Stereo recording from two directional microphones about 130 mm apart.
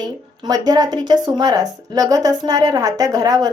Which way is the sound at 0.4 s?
30° right (ahead or behind).